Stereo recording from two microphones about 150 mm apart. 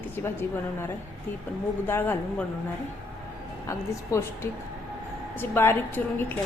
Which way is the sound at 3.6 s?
15° left (ahead or behind).